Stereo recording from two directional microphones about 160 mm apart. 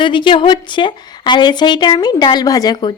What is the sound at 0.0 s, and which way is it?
A woman's voice, 30° left (ahead or behind).